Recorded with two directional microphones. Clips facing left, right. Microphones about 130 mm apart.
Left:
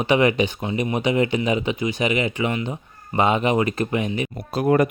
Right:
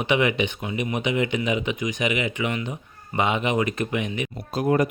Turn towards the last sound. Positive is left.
turn(degrees=65)  # may be behind; listen again after turning